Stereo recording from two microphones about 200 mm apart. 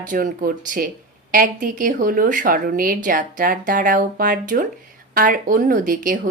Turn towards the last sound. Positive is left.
turn(degrees=-40)  # may be behind; listen again after turning